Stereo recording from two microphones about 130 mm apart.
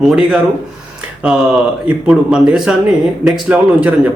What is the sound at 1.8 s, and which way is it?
Speech, 5° right (ahead or behind).